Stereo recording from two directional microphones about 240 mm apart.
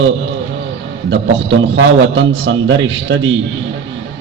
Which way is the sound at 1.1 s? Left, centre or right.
Right.